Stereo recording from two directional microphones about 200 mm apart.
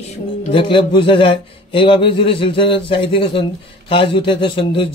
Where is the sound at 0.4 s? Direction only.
25° left (ahead or behind).